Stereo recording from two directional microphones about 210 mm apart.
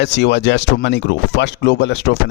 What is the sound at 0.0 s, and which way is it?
Speech, 55° left (ahead or behind).